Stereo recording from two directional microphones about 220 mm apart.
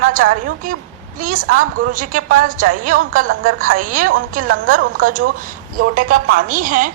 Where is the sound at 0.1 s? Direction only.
40° right (ahead or behind).